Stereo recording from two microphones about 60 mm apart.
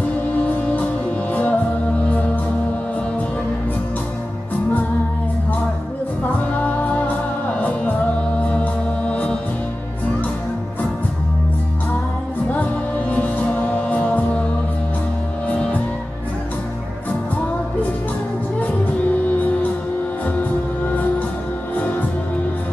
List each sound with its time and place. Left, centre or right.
0.3 s music: left
6.5 s music: left
13.1 s music: left
15.4 s music: left
19.3 s music: left
20.8 s music: left